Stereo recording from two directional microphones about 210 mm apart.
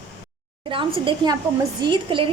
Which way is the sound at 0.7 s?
25° right (ahead or behind).